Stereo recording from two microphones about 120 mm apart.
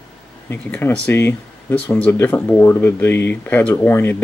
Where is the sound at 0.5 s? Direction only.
20° left (ahead or behind).